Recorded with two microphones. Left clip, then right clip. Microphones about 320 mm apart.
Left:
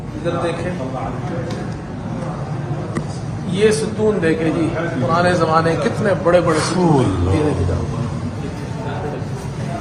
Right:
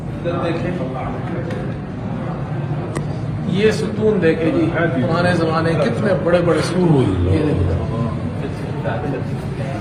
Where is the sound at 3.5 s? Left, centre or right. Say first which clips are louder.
Left 2 dB; left.